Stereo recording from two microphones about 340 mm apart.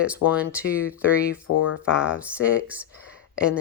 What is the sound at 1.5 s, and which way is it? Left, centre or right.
Speech, left.